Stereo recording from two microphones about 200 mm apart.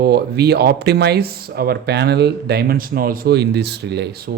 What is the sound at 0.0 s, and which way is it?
Speech, 55° right (ahead or behind).